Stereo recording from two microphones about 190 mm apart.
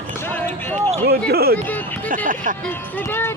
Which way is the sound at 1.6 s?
10° left (ahead or behind).